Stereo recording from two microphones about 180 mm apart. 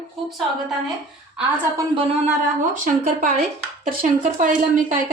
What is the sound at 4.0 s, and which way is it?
Speech, 50° right (ahead or behind).